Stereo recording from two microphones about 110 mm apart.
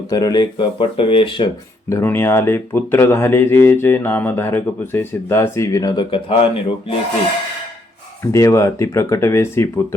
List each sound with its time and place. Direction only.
0.1 s speech: 35° left (ahead or behind); by 1.5 s 50° left (ahead or behind)
1.9 s speech: 20° left (ahead or behind)
6.1 s speech: 55° left (ahead or behind)
8.2 s speech: 25° left (ahead or behind)